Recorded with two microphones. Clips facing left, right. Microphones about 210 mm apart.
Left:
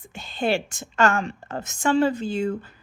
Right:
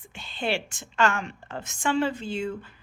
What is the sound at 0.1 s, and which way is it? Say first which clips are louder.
A woman's voice: left 5 dB; 40° left (ahead or behind).